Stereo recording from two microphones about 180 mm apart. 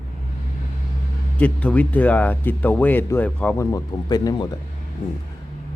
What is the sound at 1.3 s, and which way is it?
Speech, 5° left (ahead or behind).